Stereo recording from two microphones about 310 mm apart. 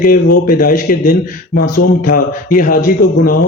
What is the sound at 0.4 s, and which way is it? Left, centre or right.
Speech, left.